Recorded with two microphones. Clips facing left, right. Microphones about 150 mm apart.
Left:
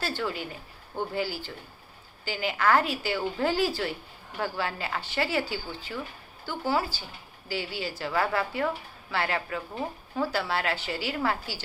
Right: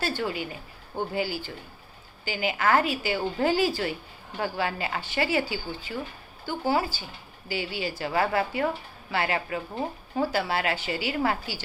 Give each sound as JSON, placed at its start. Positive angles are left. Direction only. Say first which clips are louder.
{"t": 0.0, "sound": "speech", "louder": "right 2 dB", "side_deg": -15}